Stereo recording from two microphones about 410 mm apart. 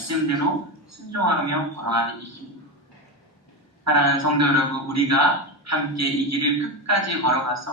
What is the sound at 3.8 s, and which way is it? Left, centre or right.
Speech, right.